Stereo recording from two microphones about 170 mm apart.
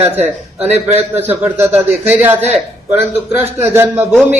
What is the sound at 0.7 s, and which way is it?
Speech, 40° right (ahead or behind).